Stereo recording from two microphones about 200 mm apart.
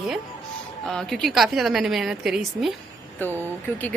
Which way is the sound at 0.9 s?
Centre (ahead or behind).